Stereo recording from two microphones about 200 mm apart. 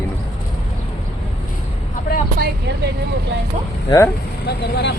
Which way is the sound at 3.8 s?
15° left (ahead or behind).